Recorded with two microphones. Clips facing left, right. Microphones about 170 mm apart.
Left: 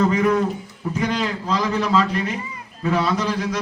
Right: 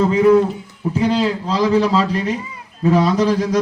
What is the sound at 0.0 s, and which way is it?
A man's voice, 30° right (ahead or behind).